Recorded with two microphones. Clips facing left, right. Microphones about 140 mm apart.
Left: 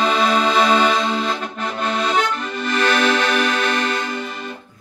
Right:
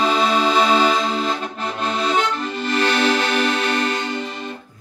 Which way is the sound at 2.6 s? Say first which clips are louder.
Left 1 dB; 30° right (ahead or behind).